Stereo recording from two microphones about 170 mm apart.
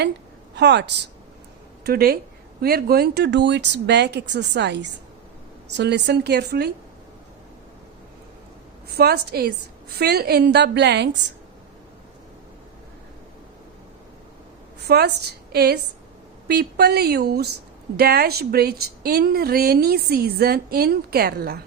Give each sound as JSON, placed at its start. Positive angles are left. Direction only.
{"t": 0.5, "sound": "a woman's voice", "side_deg": -90}
{"t": 1.8, "sound": "speech", "side_deg": -65}
{"t": 8.9, "sound": "speech", "side_deg": -70}
{"t": 14.8, "sound": "speech", "side_deg": -75}